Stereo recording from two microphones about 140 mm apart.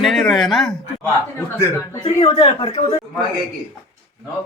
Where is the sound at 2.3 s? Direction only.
30° left (ahead or behind).